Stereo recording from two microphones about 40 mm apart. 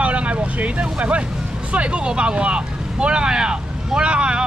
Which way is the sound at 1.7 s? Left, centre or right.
Right.